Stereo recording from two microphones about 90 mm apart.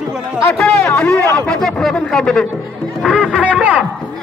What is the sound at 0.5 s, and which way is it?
A man's voice, 5° left (ahead or behind).